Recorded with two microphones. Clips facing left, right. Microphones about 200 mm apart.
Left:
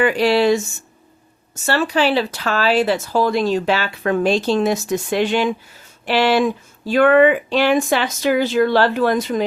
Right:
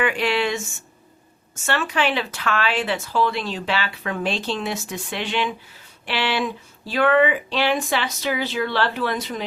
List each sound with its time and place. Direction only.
0.0 s speech: 35° left (ahead or behind)
1.6 s speech: 35° left (ahead or behind)